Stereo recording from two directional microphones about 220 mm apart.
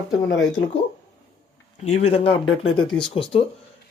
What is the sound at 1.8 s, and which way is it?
Speech, 30° left (ahead or behind).